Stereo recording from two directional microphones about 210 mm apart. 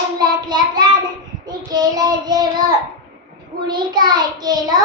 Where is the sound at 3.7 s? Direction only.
20° right (ahead or behind).